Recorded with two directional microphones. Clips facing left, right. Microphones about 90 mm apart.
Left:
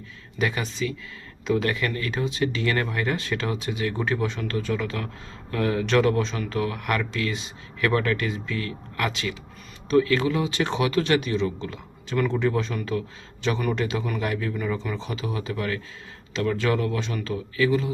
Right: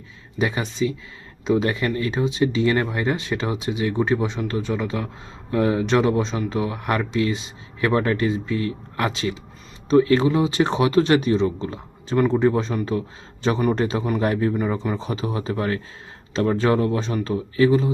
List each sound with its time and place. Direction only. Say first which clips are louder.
0.3 s a man's voice: right 3 dB; 25° right (ahead or behind)